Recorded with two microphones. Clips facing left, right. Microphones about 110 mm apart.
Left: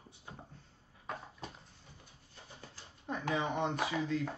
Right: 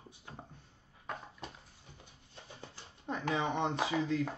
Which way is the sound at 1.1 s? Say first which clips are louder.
Even; centre (ahead or behind).